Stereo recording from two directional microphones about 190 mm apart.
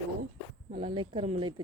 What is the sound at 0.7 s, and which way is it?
Speech, 30° right (ahead or behind).